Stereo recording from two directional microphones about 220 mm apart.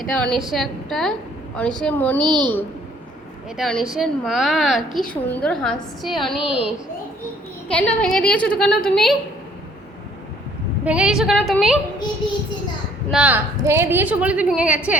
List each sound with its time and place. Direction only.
0.0 s a woman's voice: 5° left (ahead or behind)
2.2 s a child's voice: 20° right (ahead or behind)
3.6 s a woman's voice: centre (ahead or behind)
7.7 s a woman's voice: 5° left (ahead or behind)
10.8 s a woman's voice: 5° right (ahead or behind)
13.1 s a woman's voice: 5° right (ahead or behind)